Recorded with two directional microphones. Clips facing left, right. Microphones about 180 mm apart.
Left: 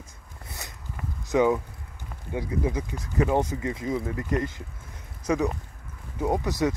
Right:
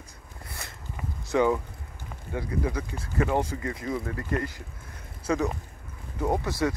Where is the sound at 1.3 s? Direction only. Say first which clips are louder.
Left 2 dB; 15° left (ahead or behind).